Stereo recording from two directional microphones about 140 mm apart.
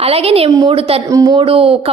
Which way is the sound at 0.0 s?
45° right (ahead or behind).